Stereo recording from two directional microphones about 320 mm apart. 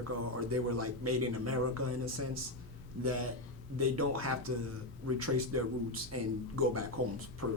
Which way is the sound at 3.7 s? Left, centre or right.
Right.